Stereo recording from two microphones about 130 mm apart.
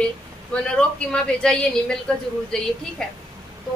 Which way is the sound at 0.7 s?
5° left (ahead or behind).